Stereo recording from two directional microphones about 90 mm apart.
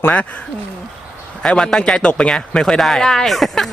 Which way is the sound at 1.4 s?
5° left (ahead or behind).